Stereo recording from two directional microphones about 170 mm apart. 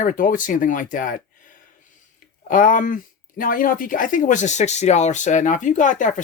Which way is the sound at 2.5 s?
50° left (ahead or behind).